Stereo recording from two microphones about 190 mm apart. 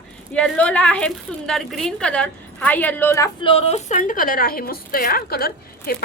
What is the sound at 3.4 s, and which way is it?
A woman's voice, 30° left (ahead or behind).